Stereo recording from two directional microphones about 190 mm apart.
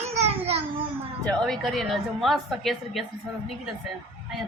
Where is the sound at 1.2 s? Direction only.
5° left (ahead or behind).